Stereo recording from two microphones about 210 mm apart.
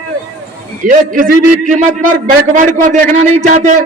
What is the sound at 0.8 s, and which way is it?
A man's voice, 40° right (ahead or behind).